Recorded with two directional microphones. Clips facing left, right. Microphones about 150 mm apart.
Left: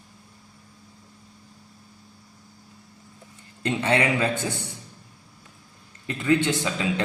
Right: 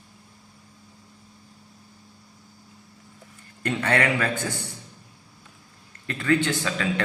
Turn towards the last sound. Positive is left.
turn(degrees=20)  # may be behind; listen again after turning